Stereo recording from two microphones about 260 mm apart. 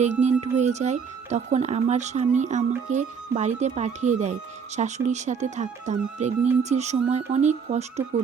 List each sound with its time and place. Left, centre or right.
0.0 s speech: right